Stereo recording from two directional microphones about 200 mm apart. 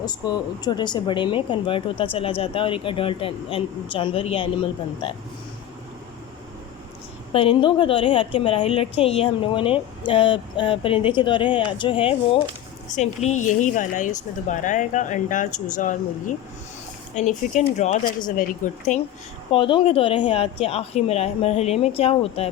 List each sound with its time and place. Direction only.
0.0 s a woman's voice: 20° left (ahead or behind)
7.3 s a woman's voice: 25° left (ahead or behind)
19.5 s a woman's voice: 25° left (ahead or behind)